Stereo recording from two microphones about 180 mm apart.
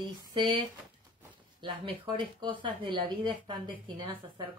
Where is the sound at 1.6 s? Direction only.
25° right (ahead or behind).